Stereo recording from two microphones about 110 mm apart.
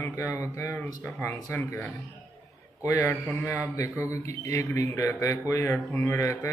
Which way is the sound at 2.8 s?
30° left (ahead or behind).